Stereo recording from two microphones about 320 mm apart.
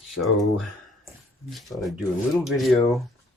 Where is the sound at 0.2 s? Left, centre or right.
Centre.